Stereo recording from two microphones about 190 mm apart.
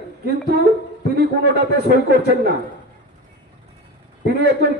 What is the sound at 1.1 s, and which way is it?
A man's voice, 55° right (ahead or behind).